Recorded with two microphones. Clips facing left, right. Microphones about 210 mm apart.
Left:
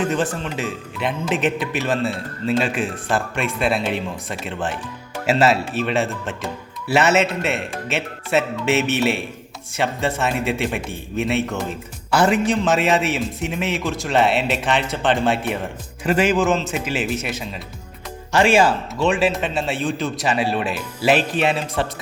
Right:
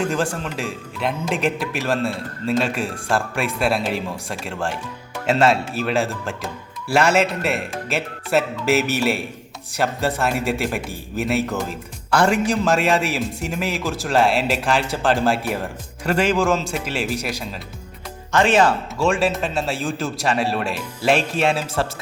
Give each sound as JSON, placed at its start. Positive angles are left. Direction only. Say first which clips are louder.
{"t": 0.0, "sound": "a man's voice", "louder": "left 1 dB", "side_deg": 0}
{"t": 18.3, "sound": "a man's voice", "louder": "left 1 dB", "side_deg": 10}